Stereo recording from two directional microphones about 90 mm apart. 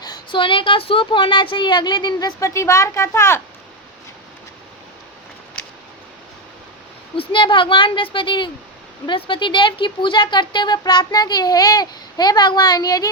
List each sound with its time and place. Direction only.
0.0 s a sound: 50° left (ahead or behind)
0.3 s a woman's voice: 70° left (ahead or behind); by 2.3 s 50° left (ahead or behind)
2.4 s a woman's voice: 35° left (ahead or behind)
7.2 s a woman's voice: 65° left (ahead or behind); by 13.1 s 45° left (ahead or behind)